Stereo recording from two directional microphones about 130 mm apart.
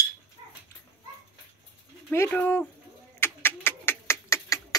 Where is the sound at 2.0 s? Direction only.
15° left (ahead or behind).